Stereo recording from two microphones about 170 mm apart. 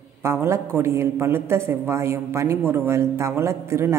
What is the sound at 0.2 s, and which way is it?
A woman's voice, 15° right (ahead or behind).